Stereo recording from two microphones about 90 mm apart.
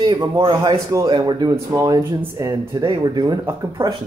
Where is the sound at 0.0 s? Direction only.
50° right (ahead or behind).